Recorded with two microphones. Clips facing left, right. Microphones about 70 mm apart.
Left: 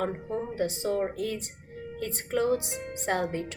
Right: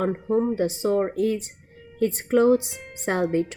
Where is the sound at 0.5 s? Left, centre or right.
Right.